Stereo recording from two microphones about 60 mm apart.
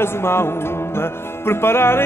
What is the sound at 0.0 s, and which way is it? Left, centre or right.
Music, left.